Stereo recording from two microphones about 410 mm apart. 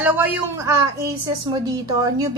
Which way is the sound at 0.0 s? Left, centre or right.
Centre.